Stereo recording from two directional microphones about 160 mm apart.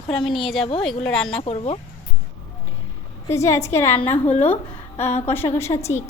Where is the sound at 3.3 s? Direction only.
15° left (ahead or behind).